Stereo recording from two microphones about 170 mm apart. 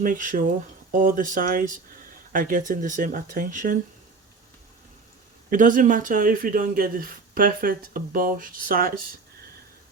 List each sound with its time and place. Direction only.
0.0 s speech: 55° right (ahead or behind)
5.5 s speech: 50° right (ahead or behind)